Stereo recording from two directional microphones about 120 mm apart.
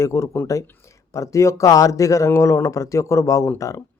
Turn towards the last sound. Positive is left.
turn(degrees=25)  # may be behind; listen again after turning